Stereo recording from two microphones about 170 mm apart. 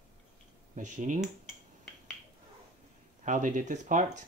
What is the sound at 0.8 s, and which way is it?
Speech, 50° right (ahead or behind).